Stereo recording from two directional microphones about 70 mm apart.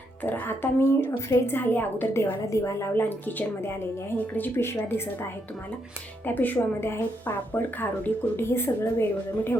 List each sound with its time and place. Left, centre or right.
0.2 s a woman's voice: left
2.5 s a woman's voice: left
2.9 s a woman's voice: left
6.2 s a woman's voice: left